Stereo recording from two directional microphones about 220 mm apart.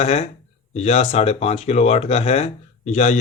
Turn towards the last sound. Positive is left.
turn(degrees=30)  # may be behind; listen again after turning